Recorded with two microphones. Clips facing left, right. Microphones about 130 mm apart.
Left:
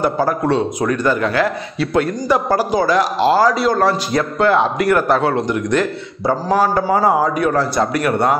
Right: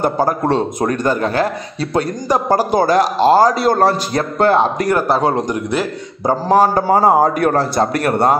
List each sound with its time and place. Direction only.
0.0 s a man's voice: 40° right (ahead or behind)
6.9 s a man's voice: 40° right (ahead or behind)